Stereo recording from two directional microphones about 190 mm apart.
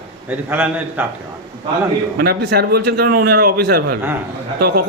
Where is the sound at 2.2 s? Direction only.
60° right (ahead or behind).